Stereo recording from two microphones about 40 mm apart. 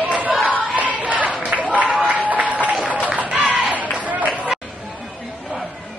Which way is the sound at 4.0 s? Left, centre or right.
Right.